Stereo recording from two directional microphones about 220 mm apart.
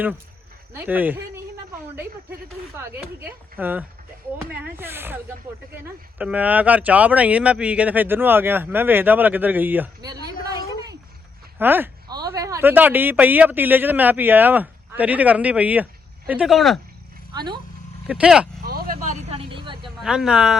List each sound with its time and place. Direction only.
0.7 s speech: 10° right (ahead or behind)
2.7 s speech: 10° right (ahead or behind)
11.6 s speech: 10° right (ahead or behind)
17.3 s speech: 20° right (ahead or behind)
18.1 s speech: 5° right (ahead or behind)
18.6 s vehicle: 45° right (ahead or behind)
19.2 s vehicle: 25° right (ahead or behind)
20.0 s speech: 5° right (ahead or behind)